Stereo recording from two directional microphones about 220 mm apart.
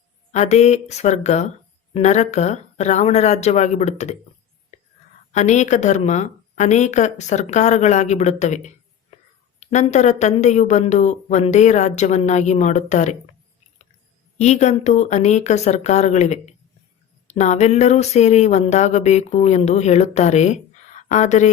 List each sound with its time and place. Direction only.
0.3 s a woman's voice: 30° left (ahead or behind)
4.7 s whispering: 30° left (ahead or behind)
5.3 s a woman's voice: 35° left (ahead or behind)
14.3 s a woman's voice: 30° left (ahead or behind)